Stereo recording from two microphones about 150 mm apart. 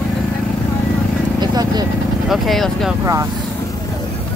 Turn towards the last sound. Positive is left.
turn(degrees=-20)  # may be behind; listen again after turning